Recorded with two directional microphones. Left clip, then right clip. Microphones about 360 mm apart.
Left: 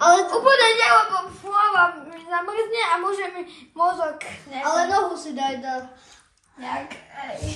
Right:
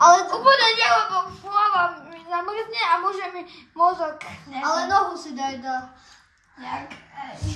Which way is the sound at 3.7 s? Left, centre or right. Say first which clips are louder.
Right 1 dB; right.